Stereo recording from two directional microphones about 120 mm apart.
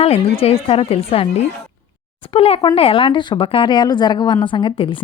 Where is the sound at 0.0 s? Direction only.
55° left (ahead or behind).